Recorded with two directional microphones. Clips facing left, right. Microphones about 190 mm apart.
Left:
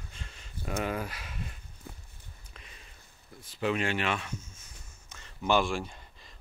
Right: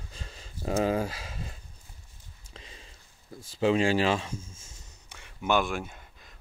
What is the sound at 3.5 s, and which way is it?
Speech, 30° right (ahead or behind).